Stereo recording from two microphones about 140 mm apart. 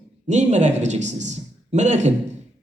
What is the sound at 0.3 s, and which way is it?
A man's voice, 55° right (ahead or behind).